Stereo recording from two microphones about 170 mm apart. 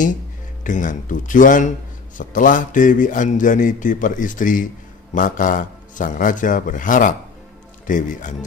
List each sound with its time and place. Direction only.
0.7 s speech: 50° left (ahead or behind)